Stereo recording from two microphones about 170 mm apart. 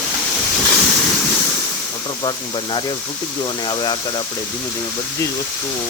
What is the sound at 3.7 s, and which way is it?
Speech, 25° left (ahead or behind).